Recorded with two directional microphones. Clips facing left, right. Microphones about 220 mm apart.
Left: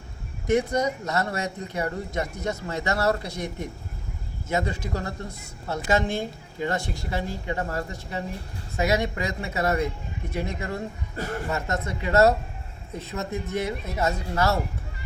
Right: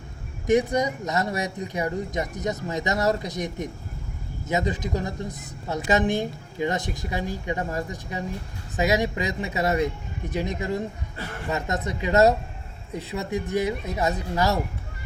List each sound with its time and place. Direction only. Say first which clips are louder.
0.4 s a woman's voice: right 2 dB; 15° right (ahead or behind)